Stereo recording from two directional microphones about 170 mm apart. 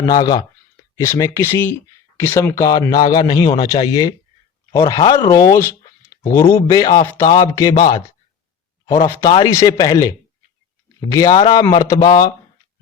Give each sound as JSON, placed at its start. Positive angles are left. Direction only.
{"t": 0.0, "sound": "speech", "side_deg": 25}
{"t": 9.2, "sound": "speech", "side_deg": 25}